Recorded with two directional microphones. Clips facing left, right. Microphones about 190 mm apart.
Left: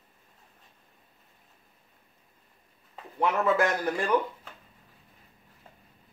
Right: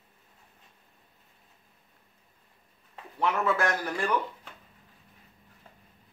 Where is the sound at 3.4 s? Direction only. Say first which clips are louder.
Left 3 dB; 20° left (ahead or behind).